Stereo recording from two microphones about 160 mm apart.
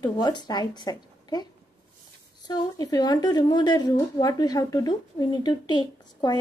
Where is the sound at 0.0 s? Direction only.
25° left (ahead or behind).